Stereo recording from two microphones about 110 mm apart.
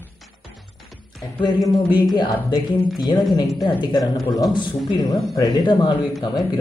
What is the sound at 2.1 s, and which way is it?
Speech, 35° left (ahead or behind).